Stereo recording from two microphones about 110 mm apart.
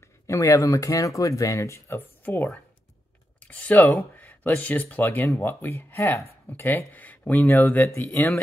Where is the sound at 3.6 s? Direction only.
15° left (ahead or behind).